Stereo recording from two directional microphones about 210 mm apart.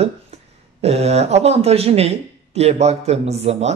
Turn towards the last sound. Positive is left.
turn(degrees=-30)  # may be behind; listen again after turning